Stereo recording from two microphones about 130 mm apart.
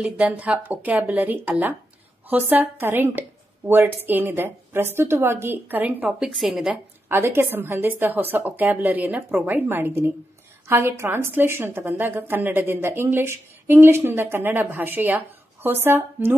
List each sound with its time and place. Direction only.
0.0 s a woman's voice: 10° right (ahead or behind)
7.1 s a woman's voice: 20° right (ahead or behind)